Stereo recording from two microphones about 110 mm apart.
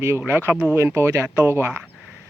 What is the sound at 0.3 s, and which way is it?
Speech, 20° right (ahead or behind).